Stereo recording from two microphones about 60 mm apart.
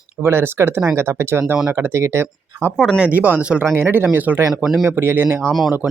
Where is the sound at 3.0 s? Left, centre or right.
Right.